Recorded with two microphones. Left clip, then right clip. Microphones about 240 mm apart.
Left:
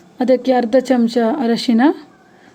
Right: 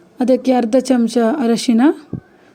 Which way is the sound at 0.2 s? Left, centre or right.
Centre.